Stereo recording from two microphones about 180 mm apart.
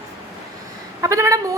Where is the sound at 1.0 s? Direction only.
15° right (ahead or behind).